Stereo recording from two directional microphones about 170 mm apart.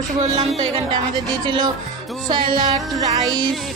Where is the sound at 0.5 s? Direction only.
30° right (ahead or behind).